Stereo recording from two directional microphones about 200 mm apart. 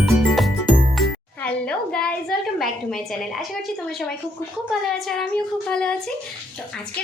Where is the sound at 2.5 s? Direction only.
Centre (ahead or behind).